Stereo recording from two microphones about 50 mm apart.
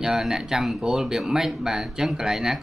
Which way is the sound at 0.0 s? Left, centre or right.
Centre.